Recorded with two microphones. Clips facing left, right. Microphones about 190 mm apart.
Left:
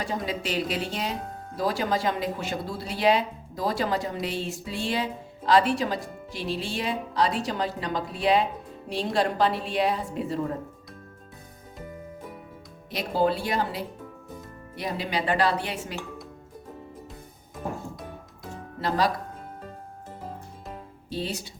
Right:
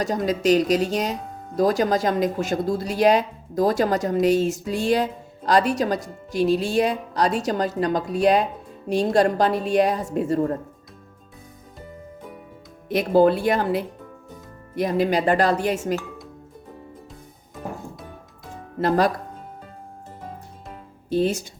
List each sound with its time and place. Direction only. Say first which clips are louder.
0.0 s speech: right 8 dB; 40° right (ahead or behind)
12.9 s speech: right 8 dB; 55° right (ahead or behind)
18.8 s speech: right 6 dB; 50° right (ahead or behind)
21.1 s speech: right 10 dB; 50° right (ahead or behind)